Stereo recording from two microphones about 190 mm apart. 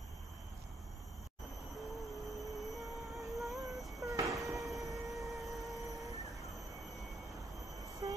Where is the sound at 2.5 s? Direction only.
Centre (ahead or behind).